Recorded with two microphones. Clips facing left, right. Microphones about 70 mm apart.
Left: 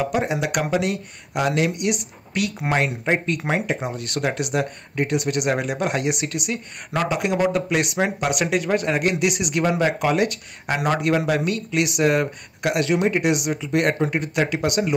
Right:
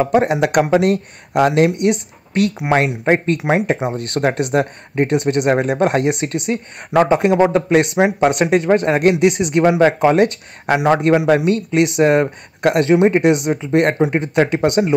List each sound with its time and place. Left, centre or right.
0.0 s speech: right
3.4 s speech: centre
3.9 s speech: right